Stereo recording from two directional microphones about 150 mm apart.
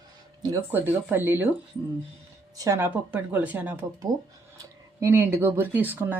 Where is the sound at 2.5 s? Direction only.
20° right (ahead or behind).